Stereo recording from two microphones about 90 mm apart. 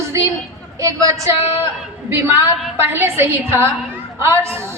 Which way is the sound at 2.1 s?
25° right (ahead or behind).